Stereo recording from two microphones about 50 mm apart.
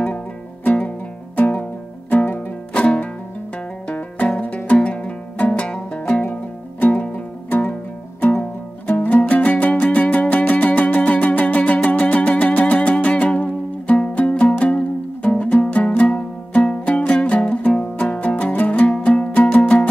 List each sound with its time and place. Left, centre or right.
0.7 s music: left
6.8 s music: left